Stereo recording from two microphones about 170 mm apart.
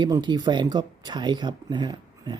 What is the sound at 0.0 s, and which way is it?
Speech, 25° right (ahead or behind).